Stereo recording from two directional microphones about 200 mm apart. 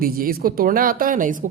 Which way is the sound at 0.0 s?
45° right (ahead or behind).